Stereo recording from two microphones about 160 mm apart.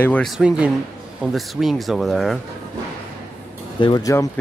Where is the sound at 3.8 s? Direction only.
25° left (ahead or behind).